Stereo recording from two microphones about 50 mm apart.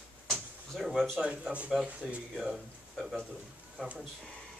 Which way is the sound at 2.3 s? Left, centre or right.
Centre.